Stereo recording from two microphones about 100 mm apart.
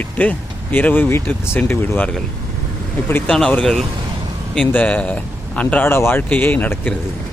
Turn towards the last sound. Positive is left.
turn(degrees=15)  # may be behind; listen again after turning